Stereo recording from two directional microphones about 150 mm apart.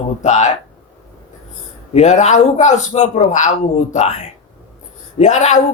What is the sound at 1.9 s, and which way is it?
Speech, 50° left (ahead or behind).